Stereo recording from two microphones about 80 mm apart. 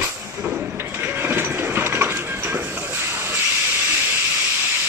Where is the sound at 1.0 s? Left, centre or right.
Right.